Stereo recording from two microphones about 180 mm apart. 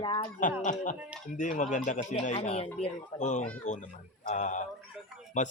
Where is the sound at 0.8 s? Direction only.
45° left (ahead or behind).